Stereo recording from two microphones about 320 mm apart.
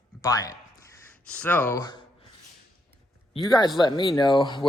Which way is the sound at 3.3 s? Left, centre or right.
Centre.